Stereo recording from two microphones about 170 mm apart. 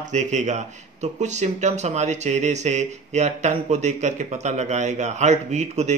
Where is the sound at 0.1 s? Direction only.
45° right (ahead or behind).